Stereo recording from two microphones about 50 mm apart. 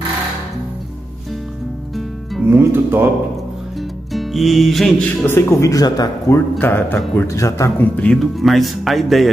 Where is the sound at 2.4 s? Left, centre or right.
Right.